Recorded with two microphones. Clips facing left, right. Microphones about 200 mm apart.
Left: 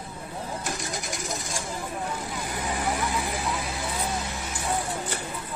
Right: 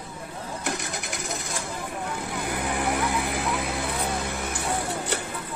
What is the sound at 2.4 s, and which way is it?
Vehicle, 60° right (ahead or behind).